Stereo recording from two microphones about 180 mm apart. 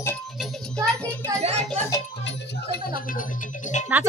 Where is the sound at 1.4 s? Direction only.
35° right (ahead or behind).